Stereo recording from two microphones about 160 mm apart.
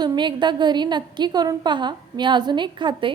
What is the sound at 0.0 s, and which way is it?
A woman's voice, 25° right (ahead or behind).